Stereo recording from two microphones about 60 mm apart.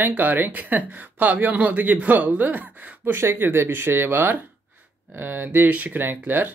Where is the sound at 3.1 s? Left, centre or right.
Right.